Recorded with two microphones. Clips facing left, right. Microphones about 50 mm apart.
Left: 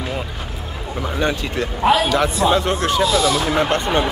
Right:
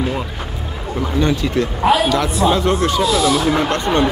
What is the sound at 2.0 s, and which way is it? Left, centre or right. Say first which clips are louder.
Speech: right 1 dB; left.